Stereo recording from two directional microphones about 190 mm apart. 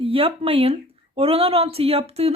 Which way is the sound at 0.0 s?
30° right (ahead or behind).